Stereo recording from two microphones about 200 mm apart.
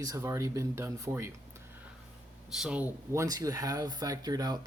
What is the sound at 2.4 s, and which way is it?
Speech, centre (ahead or behind).